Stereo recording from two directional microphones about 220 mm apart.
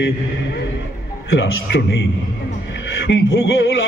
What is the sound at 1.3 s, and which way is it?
Speech, 50° left (ahead or behind).